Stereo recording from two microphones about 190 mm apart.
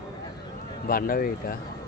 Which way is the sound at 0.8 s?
50° left (ahead or behind).